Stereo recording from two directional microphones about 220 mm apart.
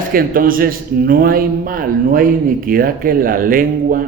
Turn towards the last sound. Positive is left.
turn(degrees=-40)  # may be behind; listen again after turning